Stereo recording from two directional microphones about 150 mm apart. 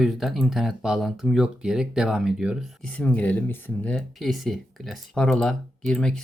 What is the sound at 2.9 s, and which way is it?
Speech, 10° left (ahead or behind).